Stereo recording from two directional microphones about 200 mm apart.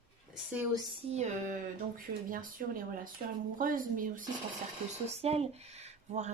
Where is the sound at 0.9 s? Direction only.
35° right (ahead or behind).